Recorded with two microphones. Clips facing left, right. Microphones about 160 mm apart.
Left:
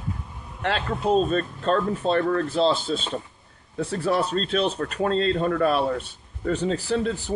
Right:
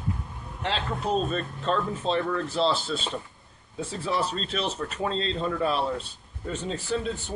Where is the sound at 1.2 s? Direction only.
40° left (ahead or behind).